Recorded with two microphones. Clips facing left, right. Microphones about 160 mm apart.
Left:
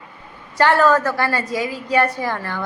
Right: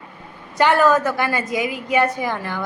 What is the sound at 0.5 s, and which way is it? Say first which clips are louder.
A woman's voice: even; 15° right (ahead or behind).